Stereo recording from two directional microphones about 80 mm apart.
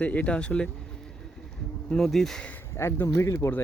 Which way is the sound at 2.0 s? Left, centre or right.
Centre.